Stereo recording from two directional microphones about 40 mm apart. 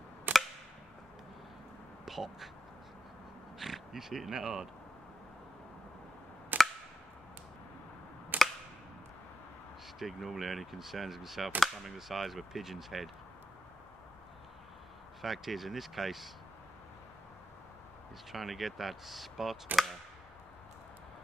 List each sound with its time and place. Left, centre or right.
0.3 s a sound: right
2.0 s speech: centre
3.5 s crow: centre
4.3 s speech: centre
6.5 s a sound: right
8.3 s a sound: right
9.9 s speech: centre
15.2 s speech: centre
18.3 s speech: centre